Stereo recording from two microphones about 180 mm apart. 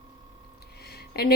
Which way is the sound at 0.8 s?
60° left (ahead or behind).